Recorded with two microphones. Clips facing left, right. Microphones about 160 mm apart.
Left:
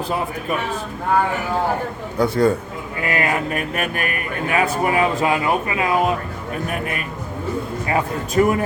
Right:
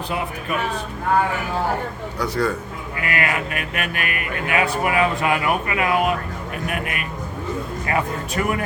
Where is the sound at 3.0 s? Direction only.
30° left (ahead or behind).